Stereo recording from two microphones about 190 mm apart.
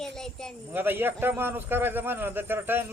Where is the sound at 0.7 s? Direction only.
10° right (ahead or behind).